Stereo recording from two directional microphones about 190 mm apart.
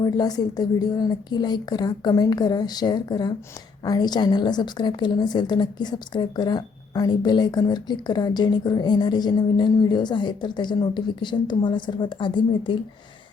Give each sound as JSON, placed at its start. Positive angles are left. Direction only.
{"t": 0.0, "sound": "a woman's voice", "side_deg": 20}